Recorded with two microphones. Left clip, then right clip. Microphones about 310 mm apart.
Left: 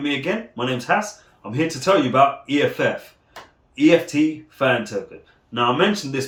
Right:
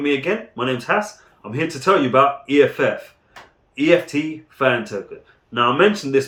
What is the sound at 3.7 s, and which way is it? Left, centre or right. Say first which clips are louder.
Speech: even; centre.